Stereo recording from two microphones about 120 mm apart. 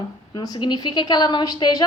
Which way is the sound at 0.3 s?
35° left (ahead or behind).